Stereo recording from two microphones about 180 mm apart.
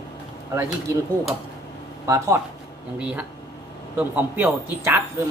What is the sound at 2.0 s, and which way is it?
Speech, 15° right (ahead or behind).